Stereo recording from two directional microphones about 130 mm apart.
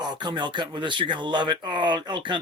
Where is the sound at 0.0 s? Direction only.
35° right (ahead or behind).